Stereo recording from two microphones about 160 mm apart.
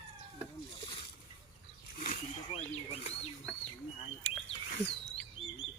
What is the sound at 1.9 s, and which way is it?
Wild animals, 55° left (ahead or behind).